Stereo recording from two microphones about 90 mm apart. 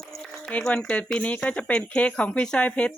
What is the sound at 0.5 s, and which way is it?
Speech, 10° left (ahead or behind).